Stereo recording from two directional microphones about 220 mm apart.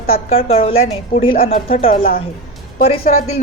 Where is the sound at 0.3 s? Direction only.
25° left (ahead or behind).